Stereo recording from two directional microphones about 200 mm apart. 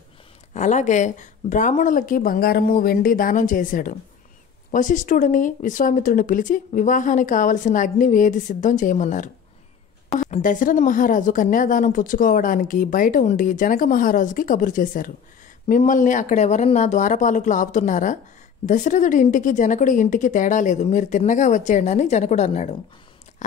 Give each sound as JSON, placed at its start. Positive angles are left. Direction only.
{"t": 0.6, "sound": "speech", "side_deg": 35}
{"t": 10.3, "sound": "speech", "side_deg": 40}